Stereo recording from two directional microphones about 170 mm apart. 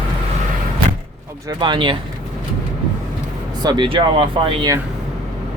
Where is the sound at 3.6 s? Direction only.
25° right (ahead or behind).